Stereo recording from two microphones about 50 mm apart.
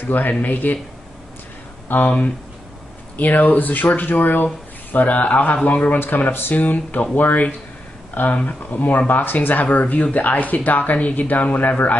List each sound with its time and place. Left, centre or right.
0.0 s speech: left
1.9 s speech: left